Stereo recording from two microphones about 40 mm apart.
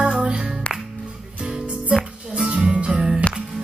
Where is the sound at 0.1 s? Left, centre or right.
Right.